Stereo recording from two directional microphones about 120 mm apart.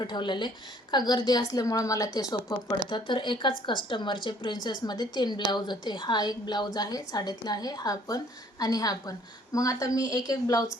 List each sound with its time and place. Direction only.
0.0 s speech: 40° left (ahead or behind)